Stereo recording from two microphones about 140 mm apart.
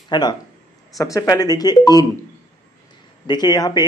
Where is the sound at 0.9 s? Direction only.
25° left (ahead or behind).